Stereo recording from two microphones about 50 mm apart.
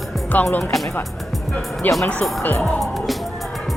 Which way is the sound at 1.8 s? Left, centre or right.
Left.